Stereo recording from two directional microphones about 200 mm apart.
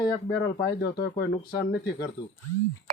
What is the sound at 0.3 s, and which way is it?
Speech, 55° left (ahead or behind).